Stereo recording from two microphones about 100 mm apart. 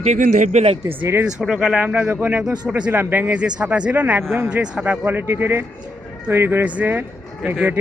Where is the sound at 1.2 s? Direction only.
5° right (ahead or behind).